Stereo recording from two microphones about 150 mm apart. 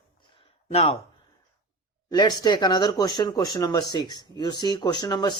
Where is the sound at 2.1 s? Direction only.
25° left (ahead or behind).